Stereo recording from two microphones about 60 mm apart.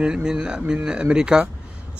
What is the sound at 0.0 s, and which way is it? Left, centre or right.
Speech, centre.